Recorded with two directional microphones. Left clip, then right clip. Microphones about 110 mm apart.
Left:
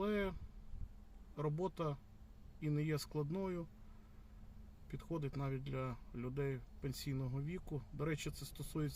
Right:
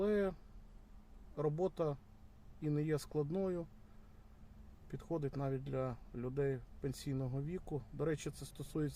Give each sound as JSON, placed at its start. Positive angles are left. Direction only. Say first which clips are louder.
{"t": 0.0, "sound": "a sound", "louder": "right 4 dB", "side_deg": -15}
{"t": 1.4, "sound": "speech", "louder": "right 4 dB", "side_deg": -15}
{"t": 4.9, "sound": "speech", "louder": "right 4 dB", "side_deg": -15}